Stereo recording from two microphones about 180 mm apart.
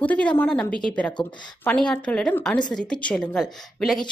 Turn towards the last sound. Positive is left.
turn(degrees=0)  # may be behind; listen again after turning